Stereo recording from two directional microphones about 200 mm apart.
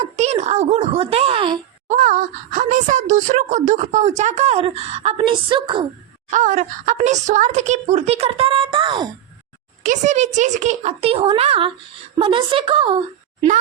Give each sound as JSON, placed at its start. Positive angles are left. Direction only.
{"t": 0.0, "sound": "speech", "side_deg": -35}
{"t": 1.9, "sound": "speech", "side_deg": -40}
{"t": 6.3, "sound": "speech", "side_deg": -40}
{"t": 9.8, "sound": "a woman's voice", "side_deg": -35}